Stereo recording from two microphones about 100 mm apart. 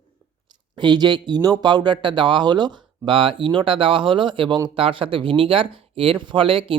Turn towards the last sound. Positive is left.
turn(degrees=-60)  # may be behind; listen again after turning